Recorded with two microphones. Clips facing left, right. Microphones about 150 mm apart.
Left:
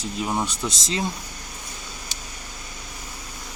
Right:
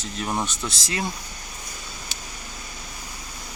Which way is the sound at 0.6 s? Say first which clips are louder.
Left 2 dB; 20° left (ahead or behind).